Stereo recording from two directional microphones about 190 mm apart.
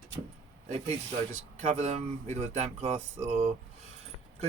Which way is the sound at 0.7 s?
35° right (ahead or behind).